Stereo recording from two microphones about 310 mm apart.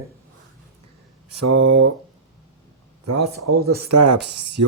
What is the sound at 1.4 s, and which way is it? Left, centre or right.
Speech, right.